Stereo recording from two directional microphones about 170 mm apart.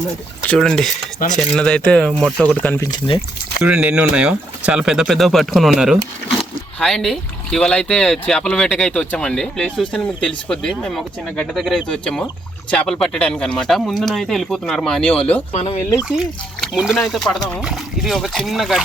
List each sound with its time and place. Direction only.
0.4 s speech: 5° left (ahead or behind)
3.6 s speech: 5° right (ahead or behind)
15.5 s speech: 35° left (ahead or behind)
16.0 s speech: 5° right (ahead or behind)